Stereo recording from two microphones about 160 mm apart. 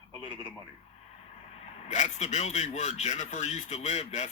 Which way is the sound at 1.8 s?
45° left (ahead or behind).